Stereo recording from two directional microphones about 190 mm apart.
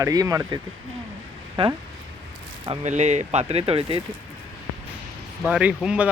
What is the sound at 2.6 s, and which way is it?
Speech, 35° right (ahead or behind).